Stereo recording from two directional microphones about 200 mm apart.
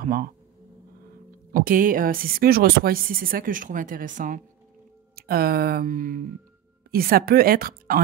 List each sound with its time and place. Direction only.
0.0 s speech: 45° right (ahead or behind)
1.5 s speech: 45° right (ahead or behind)